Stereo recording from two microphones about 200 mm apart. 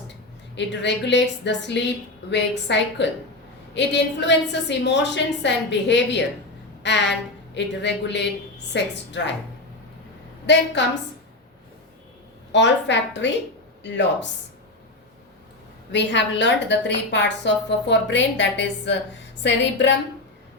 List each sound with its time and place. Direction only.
0.5 s a woman's voice: 60° left (ahead or behind)
10.4 s a woman's voice: 60° left (ahead or behind)
12.5 s a woman's voice: 60° left (ahead or behind)
15.9 s a woman's voice: 60° left (ahead or behind)